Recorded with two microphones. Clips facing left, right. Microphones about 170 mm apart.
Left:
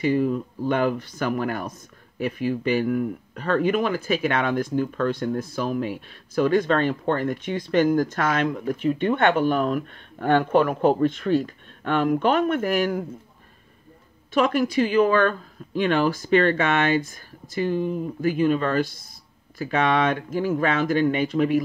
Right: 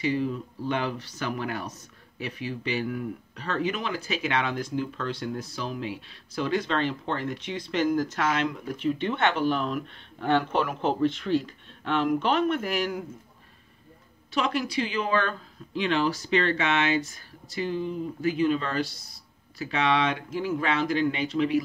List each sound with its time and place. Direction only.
0.0 s speech: 50° left (ahead or behind)
14.3 s speech: 50° left (ahead or behind)